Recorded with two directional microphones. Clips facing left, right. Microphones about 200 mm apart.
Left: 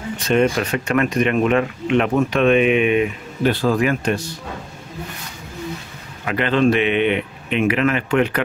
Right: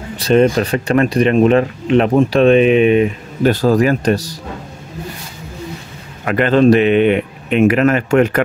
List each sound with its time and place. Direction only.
0.2 s speech: 35° right (ahead or behind)
6.2 s speech: 50° right (ahead or behind)